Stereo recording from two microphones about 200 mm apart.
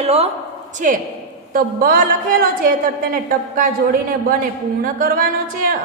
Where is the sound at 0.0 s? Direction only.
30° right (ahead or behind).